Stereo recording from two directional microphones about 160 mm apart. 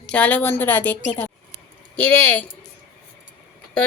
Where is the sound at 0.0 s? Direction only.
10° left (ahead or behind).